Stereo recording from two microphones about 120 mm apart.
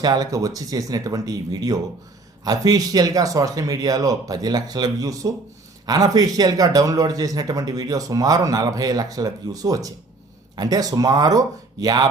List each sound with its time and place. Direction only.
0.0 s speech: 35° right (ahead or behind)